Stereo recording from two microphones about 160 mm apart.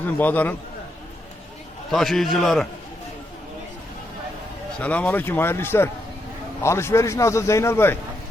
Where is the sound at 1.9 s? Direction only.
Centre (ahead or behind).